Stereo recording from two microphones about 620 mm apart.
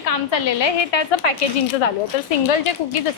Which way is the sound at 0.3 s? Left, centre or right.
Left.